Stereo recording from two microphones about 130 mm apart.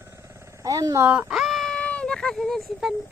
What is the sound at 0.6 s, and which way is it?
Speech, 30° right (ahead or behind).